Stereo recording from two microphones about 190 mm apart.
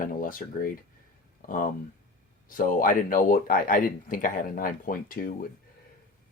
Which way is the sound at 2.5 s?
45° left (ahead or behind).